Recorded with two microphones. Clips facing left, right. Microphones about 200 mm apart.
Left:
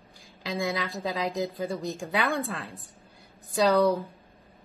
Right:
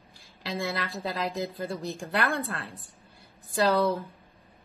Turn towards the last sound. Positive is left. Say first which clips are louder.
# left 2 dB
turn(degrees=-10)  # may be behind; listen again after turning